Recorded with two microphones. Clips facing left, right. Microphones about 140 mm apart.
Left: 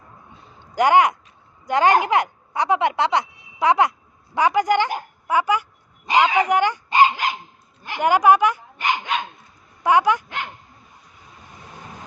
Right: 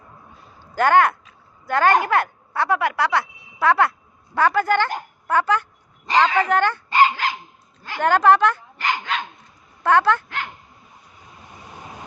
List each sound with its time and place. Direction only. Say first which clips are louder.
0.6 s speech: even; 15° left (ahead or behind)